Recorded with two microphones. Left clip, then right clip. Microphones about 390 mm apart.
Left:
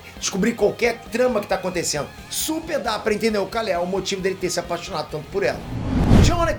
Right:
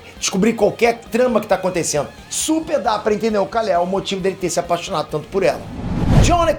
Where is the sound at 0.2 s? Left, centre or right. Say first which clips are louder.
Right 4 dB; centre.